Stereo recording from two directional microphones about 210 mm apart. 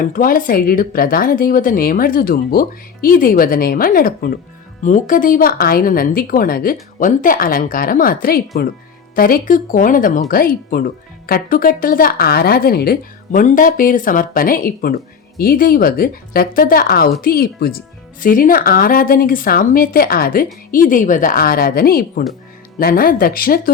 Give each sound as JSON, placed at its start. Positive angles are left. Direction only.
{"t": 0.0, "sound": "speech", "side_deg": 40}